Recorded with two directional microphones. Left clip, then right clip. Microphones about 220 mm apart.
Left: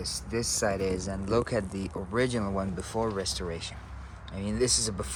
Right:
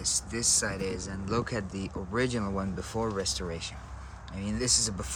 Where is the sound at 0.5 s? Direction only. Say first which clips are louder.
Left 3 dB; 5° left (ahead or behind).